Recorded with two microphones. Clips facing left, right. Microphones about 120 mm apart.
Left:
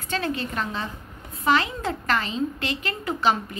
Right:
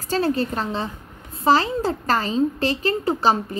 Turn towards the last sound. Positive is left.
turn(degrees=-35)  # may be behind; listen again after turning